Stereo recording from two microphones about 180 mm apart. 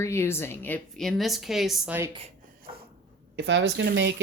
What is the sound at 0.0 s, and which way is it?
A woman's voice, 15° left (ahead or behind).